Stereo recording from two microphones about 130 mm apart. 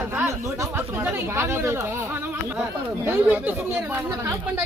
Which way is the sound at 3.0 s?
15° right (ahead or behind).